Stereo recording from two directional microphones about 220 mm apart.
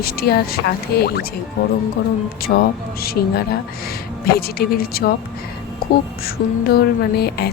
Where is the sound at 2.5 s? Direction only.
45° left (ahead or behind).